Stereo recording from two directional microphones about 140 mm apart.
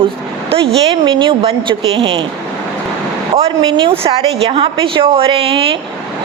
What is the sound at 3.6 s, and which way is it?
A woman's voice, 35° right (ahead or behind).